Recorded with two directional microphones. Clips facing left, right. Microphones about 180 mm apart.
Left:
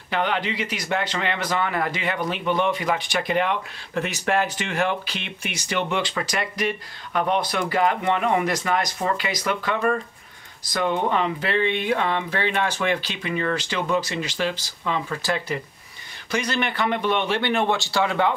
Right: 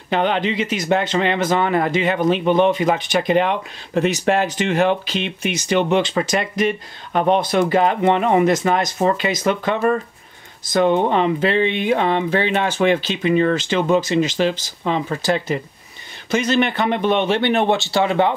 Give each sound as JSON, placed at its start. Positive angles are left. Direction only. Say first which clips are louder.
{"t": 0.1, "sound": "speech", "louder": "right 6 dB", "side_deg": -25}